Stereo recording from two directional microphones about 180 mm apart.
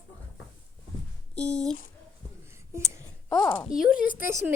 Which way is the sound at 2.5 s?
15° right (ahead or behind).